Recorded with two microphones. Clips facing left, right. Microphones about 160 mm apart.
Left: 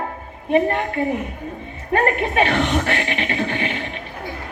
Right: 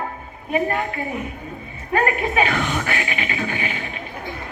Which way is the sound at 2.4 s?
30° left (ahead or behind).